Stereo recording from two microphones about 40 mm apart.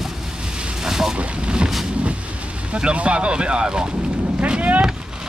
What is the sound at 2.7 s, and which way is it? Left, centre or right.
Speech, right.